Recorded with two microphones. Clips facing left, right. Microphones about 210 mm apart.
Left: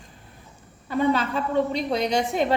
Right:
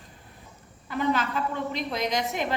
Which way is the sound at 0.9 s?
30° left (ahead or behind).